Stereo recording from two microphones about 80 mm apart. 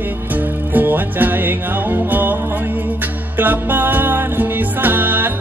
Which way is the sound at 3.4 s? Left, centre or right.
Right.